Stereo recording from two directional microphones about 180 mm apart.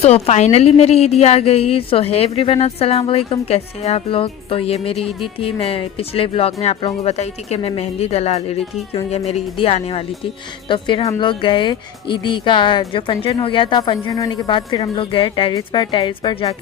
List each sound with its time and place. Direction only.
0.0 s a woman's voice: 35° left (ahead or behind)